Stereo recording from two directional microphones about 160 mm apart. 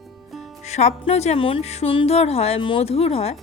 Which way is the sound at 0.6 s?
45° left (ahead or behind).